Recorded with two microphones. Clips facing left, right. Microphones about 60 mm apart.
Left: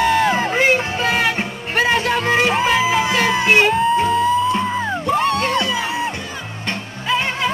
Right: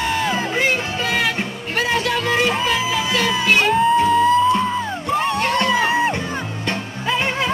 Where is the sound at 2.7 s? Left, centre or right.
Left.